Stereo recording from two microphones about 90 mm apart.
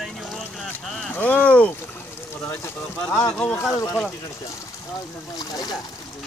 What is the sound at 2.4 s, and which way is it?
Speech, 30° left (ahead or behind).